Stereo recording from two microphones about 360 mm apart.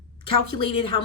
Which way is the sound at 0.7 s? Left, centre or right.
Centre.